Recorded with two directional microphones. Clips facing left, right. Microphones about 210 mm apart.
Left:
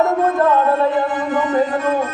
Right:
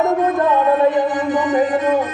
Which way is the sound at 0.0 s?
15° right (ahead or behind).